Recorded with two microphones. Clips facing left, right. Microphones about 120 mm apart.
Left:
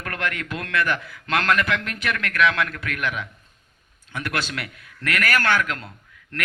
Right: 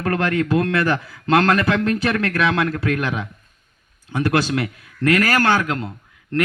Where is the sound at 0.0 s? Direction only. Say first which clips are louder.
Right 9 dB; 30° right (ahead or behind).